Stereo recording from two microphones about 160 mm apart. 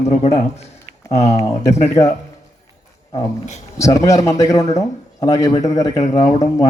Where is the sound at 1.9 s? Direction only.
20° left (ahead or behind).